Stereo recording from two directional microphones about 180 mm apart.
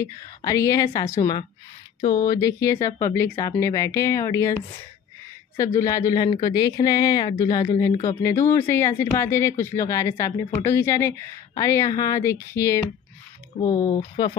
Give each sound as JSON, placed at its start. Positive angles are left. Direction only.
{"t": 0.0, "sound": "speech", "side_deg": 20}
{"t": 5.6, "sound": "speech", "side_deg": 15}
{"t": 13.5, "sound": "speech", "side_deg": 35}